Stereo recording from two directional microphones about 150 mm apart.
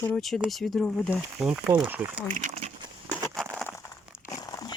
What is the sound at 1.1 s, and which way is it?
Speech, 5° right (ahead or behind).